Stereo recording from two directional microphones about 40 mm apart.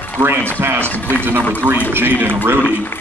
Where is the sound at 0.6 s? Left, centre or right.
Right.